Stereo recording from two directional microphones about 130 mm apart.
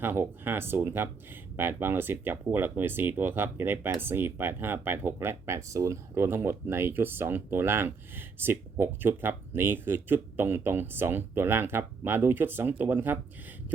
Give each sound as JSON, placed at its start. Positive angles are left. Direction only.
{"t": 0.0, "sound": "speech", "side_deg": -15}